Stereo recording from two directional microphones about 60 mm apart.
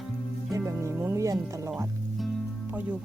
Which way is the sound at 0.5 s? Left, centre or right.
Right.